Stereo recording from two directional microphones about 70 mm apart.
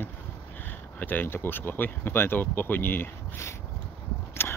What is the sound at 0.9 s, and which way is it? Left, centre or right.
Speech, left.